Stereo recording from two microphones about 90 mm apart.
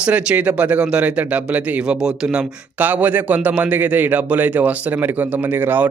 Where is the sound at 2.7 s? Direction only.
20° right (ahead or behind).